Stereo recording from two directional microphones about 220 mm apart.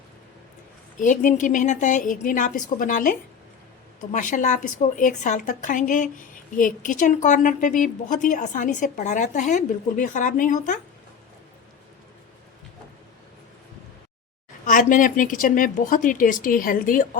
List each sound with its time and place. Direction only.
0.9 s a woman's voice: 35° left (ahead or behind)
14.6 s a woman's voice: 35° left (ahead or behind)